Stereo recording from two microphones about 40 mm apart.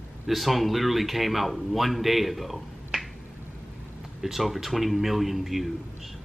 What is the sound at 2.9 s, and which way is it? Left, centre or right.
Finger snapping, centre.